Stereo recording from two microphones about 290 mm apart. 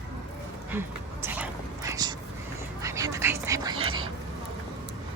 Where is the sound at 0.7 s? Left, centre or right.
Centre.